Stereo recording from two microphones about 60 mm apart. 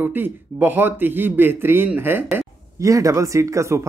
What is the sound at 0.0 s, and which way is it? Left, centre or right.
A man's voice, right.